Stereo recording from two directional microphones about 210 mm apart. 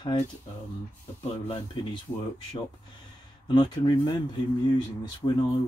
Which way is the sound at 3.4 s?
20° left (ahead or behind).